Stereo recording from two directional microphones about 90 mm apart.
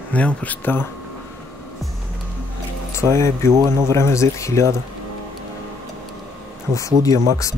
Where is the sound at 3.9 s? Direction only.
30° left (ahead or behind).